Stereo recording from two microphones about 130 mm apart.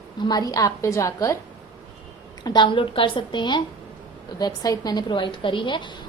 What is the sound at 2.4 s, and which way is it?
A woman's voice, 35° left (ahead or behind).